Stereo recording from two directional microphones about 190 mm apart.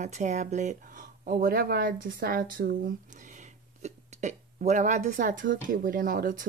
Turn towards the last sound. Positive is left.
turn(degrees=-45)  # may be behind; listen again after turning